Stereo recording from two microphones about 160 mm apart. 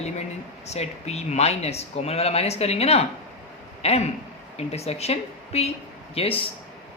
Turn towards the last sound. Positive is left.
turn(degrees=35)  # may be behind; listen again after turning